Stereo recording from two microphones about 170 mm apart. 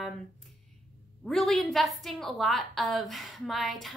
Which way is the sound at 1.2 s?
Centre (ahead or behind).